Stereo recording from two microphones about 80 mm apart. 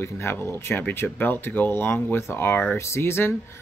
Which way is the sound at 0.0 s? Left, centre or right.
Left.